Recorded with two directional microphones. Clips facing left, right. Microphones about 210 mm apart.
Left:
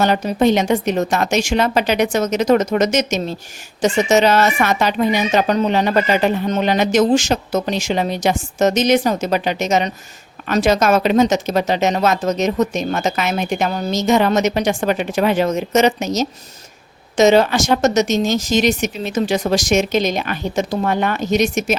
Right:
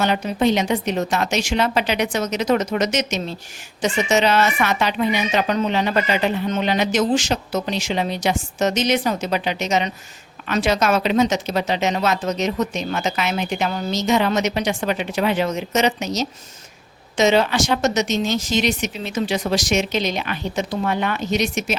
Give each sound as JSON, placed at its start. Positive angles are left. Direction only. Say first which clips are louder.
{"t": 0.0, "sound": "speech", "louder": "left 4 dB", "side_deg": 40}